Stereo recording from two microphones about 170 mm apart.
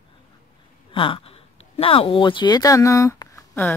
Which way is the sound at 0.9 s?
30° left (ahead or behind).